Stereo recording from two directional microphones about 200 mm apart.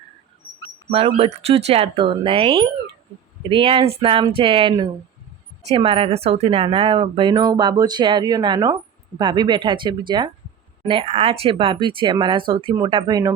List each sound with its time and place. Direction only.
0.9 s speech: 30° right (ahead or behind)